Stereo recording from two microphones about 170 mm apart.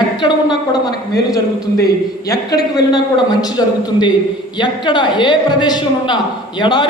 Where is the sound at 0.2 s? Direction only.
25° left (ahead or behind).